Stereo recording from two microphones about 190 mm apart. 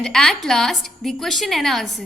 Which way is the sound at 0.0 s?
5° left (ahead or behind).